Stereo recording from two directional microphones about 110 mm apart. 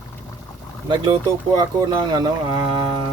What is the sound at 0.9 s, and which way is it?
Speech, 40° right (ahead or behind).